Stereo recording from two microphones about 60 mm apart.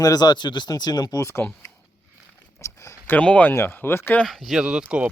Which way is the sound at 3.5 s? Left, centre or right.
Left.